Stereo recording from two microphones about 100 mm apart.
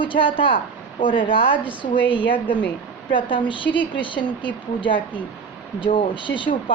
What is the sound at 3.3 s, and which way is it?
A woman's voice, 55° left (ahead or behind).